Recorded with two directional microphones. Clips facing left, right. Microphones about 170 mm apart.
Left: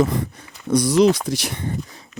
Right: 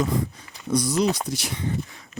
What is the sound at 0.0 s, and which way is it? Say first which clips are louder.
Speech: left 4 dB; 70° left (ahead or behind).